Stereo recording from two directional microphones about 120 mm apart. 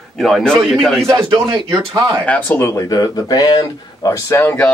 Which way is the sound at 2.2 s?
15° left (ahead or behind).